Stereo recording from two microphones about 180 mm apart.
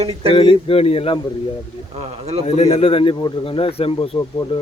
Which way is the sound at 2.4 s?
35° left (ahead or behind).